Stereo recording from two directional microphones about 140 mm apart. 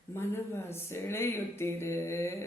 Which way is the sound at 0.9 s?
15° left (ahead or behind).